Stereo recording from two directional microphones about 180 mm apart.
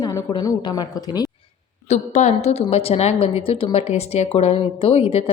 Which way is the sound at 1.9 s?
40° left (ahead or behind).